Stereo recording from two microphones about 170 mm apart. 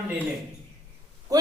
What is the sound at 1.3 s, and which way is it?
Speech, 20° right (ahead or behind).